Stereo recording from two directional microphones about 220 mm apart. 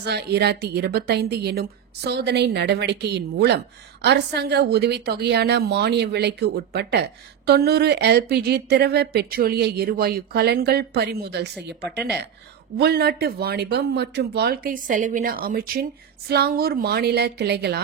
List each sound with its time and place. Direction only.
0.0 s a woman's voice: 50° right (ahead or behind)
12.7 s a woman's voice: 45° right (ahead or behind)